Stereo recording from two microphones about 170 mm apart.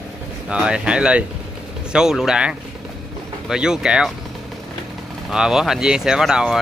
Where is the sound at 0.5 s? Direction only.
5° right (ahead or behind).